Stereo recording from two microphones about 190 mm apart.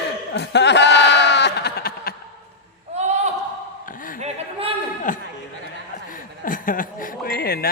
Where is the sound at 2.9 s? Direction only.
35° right (ahead or behind).